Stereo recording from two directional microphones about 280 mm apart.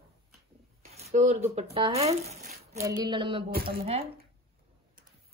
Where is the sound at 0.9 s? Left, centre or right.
Right.